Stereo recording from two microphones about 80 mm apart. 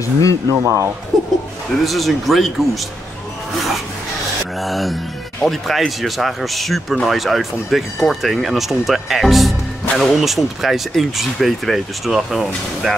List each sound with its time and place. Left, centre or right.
0.0 s speech: left
0.5 s speech: right
1.1 s music: centre
1.9 s speech: centre
4.6 s speech: centre